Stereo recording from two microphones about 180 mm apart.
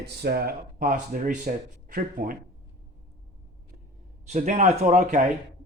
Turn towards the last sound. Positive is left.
turn(degrees=-45)  # may be behind; listen again after turning